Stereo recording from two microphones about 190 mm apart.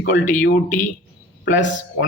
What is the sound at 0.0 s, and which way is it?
A man's voice, 45° left (ahead or behind).